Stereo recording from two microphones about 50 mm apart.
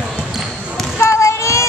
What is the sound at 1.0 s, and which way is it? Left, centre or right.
Child singing, left.